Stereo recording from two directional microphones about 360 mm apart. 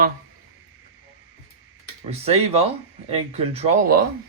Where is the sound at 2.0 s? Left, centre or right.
Centre.